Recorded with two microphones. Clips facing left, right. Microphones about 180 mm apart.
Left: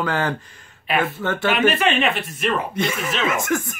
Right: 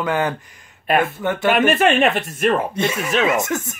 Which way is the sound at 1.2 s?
15° right (ahead or behind).